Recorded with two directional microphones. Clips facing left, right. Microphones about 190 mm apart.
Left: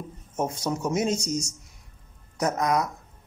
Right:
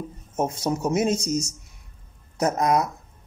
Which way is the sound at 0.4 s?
25° right (ahead or behind).